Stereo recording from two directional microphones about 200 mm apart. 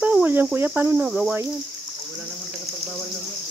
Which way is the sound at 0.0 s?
5° right (ahead or behind).